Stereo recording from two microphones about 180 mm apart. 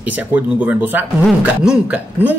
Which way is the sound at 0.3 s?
10° right (ahead or behind).